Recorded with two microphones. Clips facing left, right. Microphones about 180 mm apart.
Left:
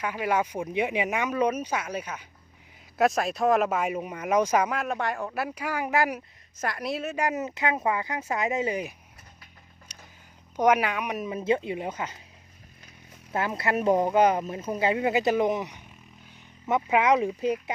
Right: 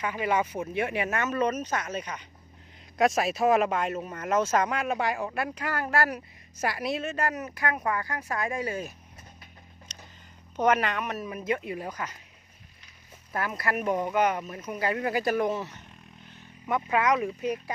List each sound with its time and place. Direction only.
0.0 s speech: 10° left (ahead or behind)
6.6 s speech: 5° right (ahead or behind)
7.3 s speech: 25° left (ahead or behind)
9.9 s a sound: 10° left (ahead or behind)
10.6 s speech: 10° left (ahead or behind)
13.3 s speech: 25° left (ahead or behind)